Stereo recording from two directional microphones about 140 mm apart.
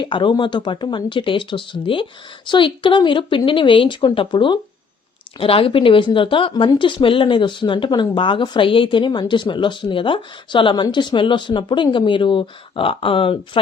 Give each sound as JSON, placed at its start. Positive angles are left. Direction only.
{"t": 0.0, "sound": "speech", "side_deg": 35}